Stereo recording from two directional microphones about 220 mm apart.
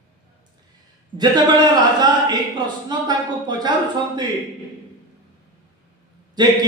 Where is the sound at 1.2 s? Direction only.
20° right (ahead or behind).